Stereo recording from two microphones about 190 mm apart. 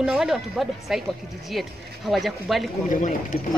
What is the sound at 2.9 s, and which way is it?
Speech, 45° left (ahead or behind).